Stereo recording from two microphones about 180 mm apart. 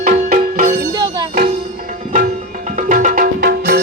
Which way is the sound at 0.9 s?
20° right (ahead or behind).